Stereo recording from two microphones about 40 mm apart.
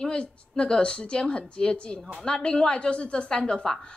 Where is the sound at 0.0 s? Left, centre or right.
Left.